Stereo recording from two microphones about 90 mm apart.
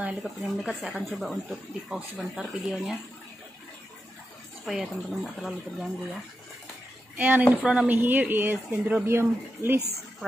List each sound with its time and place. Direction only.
0.2 s speech: centre (ahead or behind)
4.6 s speech: centre (ahead or behind)
7.2 s speech: 20° right (ahead or behind)